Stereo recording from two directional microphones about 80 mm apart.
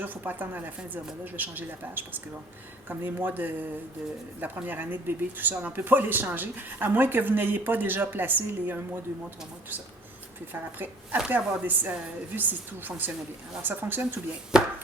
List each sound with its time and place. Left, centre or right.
0.0 s speech: right
10.5 s speech: right
14.5 s chopping: centre